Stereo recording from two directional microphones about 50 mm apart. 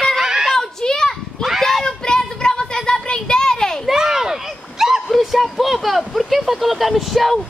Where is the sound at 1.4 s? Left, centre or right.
Centre.